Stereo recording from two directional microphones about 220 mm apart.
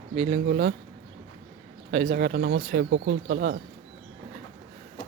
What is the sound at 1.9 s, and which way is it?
Speech, 40° right (ahead or behind).